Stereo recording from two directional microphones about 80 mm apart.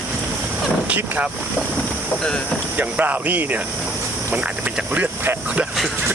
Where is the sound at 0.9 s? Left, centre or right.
Centre.